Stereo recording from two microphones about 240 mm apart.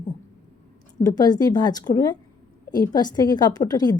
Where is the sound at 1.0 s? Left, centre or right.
Centre.